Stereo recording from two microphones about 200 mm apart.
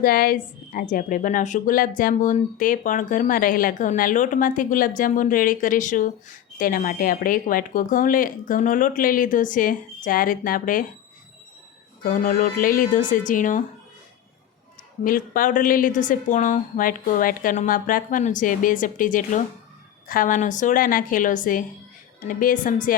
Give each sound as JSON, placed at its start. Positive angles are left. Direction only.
{"t": 0.0, "sound": "a woman's voice", "side_deg": 45}
{"t": 12.0, "sound": "a woman's voice", "side_deg": 40}
{"t": 15.0, "sound": "a woman's voice", "side_deg": 45}